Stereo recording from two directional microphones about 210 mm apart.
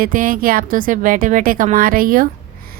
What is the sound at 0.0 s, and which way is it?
A woman's voice, 40° right (ahead or behind).